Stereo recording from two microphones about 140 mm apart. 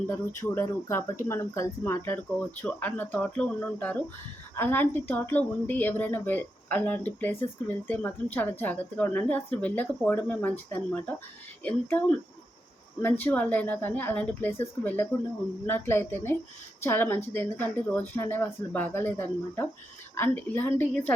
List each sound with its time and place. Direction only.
0.1 s speech: 15° left (ahead or behind)